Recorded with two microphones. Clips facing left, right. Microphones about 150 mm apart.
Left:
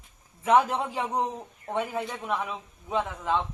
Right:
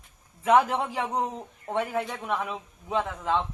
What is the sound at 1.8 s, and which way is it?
Speech, centre (ahead or behind).